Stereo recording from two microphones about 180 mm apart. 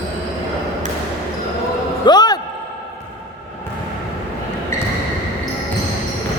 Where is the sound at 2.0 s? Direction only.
25° left (ahead or behind).